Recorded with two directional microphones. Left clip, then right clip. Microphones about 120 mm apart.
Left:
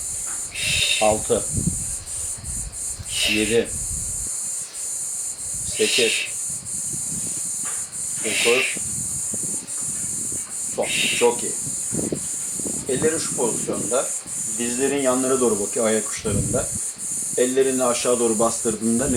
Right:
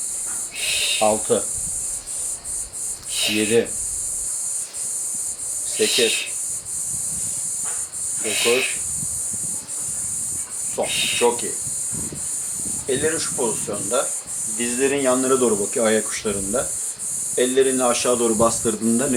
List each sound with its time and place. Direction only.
0.6 s cricket: centre (ahead or behind)
3.2 s speech: centre (ahead or behind)
5.7 s speech: centre (ahead or behind)
8.2 s speech: centre (ahead or behind)
10.8 s speech: centre (ahead or behind)
12.9 s speech: 10° right (ahead or behind)